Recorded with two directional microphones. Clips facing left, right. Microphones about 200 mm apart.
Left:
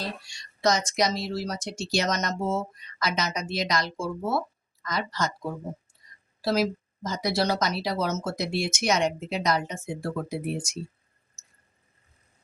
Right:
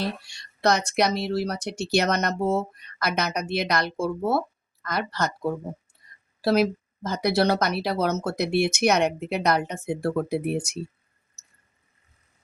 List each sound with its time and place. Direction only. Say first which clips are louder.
0.0 s speech: right 5 dB; 60° right (ahead or behind)
6.0 s a sound: right 1 dB; 60° right (ahead or behind)
6.4 s speech: right 4 dB; 60° right (ahead or behind)